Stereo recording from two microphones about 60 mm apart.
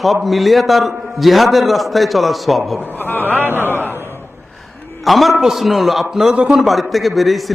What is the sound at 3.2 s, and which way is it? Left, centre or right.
Speech, right.